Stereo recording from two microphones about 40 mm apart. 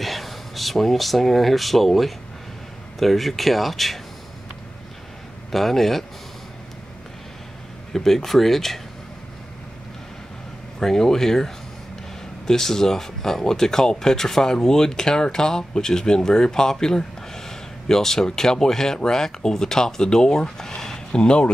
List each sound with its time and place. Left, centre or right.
0.0 s speech: centre
5.5 s speech: centre
7.9 s speech: centre
10.8 s speech: centre